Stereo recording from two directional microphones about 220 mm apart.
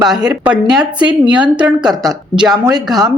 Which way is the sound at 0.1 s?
5° right (ahead or behind).